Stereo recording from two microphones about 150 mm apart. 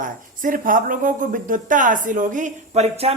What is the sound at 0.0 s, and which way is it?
Speech, 65° right (ahead or behind).